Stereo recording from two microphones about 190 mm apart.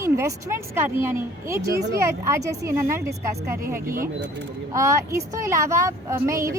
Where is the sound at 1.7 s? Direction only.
60° right (ahead or behind).